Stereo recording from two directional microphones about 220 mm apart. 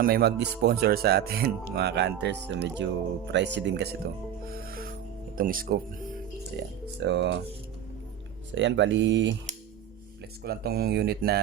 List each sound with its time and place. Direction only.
0.0 s speech: 45° right (ahead or behind)
7.0 s speech: 55° right (ahead or behind)
8.5 s speech: 55° right (ahead or behind)
10.4 s speech: 45° right (ahead or behind)